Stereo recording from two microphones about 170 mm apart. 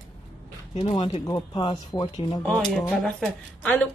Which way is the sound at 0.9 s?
30° left (ahead or behind).